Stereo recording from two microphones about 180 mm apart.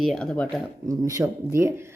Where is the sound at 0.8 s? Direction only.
15° right (ahead or behind).